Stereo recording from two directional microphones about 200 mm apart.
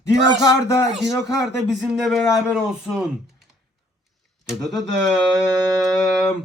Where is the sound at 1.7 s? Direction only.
5° right (ahead or behind).